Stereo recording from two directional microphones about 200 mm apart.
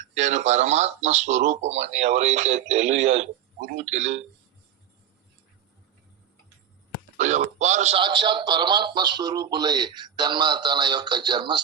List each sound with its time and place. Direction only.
0.2 s speech: 35° right (ahead or behind)
7.2 s speech: 35° right (ahead or behind)